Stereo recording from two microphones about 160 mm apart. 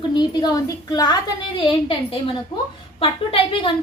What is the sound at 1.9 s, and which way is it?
A woman's voice, 35° left (ahead or behind).